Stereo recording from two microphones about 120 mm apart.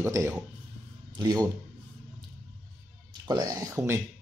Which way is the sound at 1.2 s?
35° right (ahead or behind).